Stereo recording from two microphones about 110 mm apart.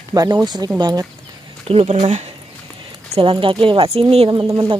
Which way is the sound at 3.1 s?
50° right (ahead or behind).